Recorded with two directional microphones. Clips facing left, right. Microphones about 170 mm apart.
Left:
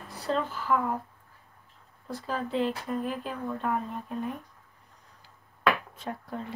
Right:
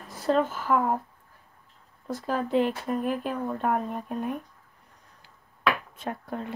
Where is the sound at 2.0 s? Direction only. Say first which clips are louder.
Right 4 dB; 45° right (ahead or behind).